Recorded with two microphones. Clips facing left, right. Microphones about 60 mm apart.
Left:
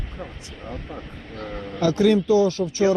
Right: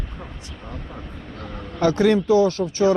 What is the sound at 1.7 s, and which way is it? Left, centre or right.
Speech, right.